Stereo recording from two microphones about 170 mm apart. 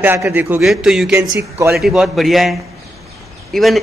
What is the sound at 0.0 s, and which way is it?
A man's voice, 10° right (ahead or behind).